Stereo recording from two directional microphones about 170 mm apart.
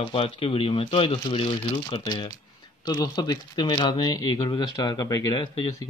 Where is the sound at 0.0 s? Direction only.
35° left (ahead or behind).